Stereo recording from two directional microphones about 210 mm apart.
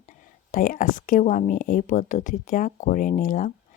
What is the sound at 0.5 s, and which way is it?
Speech, 40° left (ahead or behind).